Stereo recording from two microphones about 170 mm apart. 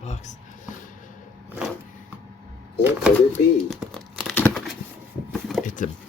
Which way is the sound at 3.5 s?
5° left (ahead or behind).